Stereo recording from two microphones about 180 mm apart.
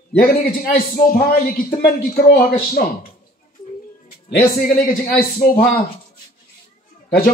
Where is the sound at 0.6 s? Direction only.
55° left (ahead or behind).